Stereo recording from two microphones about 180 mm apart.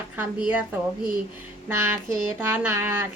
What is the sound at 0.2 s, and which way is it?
Speech, 10° right (ahead or behind).